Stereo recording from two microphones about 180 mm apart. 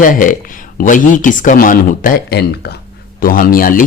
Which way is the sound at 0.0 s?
50° left (ahead or behind).